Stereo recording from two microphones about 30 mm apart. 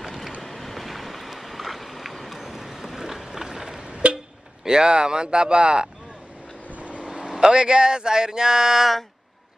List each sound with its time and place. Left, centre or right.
0.0 s boat: centre
3.9 s vehicle: right
4.6 s speech: right
6.7 s vehicle: right
7.2 s speech: right